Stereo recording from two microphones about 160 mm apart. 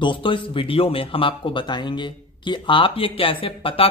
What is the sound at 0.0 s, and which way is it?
Speech, 30° left (ahead or behind).